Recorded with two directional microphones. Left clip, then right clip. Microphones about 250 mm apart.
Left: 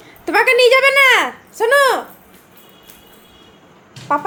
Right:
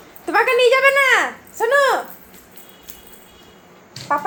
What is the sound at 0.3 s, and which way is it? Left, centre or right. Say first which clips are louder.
Speech: left 3 dB; left.